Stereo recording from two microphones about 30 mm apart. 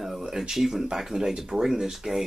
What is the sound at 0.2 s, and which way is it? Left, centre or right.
Speech, centre.